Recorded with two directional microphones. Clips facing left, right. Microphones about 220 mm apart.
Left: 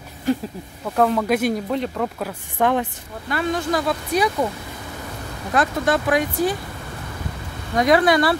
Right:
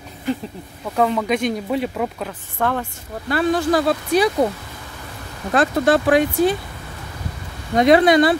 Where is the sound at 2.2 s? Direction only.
15° left (ahead or behind).